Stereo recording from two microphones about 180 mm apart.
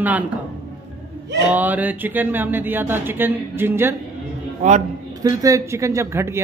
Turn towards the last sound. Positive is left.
turn(degrees=-15)  # may be behind; listen again after turning